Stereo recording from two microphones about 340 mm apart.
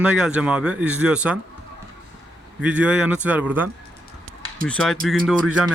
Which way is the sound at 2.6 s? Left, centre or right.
Centre.